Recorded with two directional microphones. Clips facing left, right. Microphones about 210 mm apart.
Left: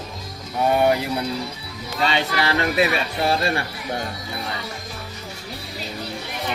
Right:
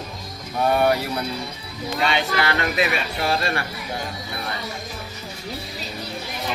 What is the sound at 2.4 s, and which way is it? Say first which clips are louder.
Speech: left 2 dB; 30° left (ahead or behind).